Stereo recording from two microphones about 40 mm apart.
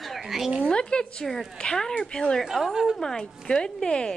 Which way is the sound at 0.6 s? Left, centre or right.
Left.